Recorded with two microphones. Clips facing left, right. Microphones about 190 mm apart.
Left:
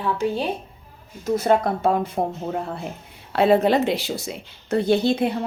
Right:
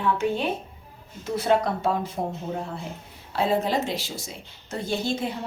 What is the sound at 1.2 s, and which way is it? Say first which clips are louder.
Speech: left 3 dB; 45° left (ahead or behind).